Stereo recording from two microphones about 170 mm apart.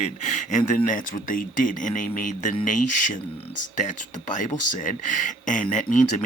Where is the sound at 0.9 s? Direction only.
50° left (ahead or behind).